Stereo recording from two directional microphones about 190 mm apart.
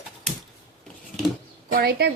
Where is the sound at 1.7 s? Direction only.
55° right (ahead or behind).